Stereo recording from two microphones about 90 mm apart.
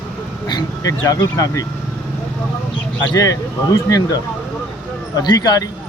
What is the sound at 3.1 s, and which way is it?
Speech, 40° left (ahead or behind).